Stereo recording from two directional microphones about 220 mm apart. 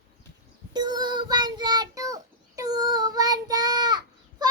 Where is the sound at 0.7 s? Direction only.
20° right (ahead or behind).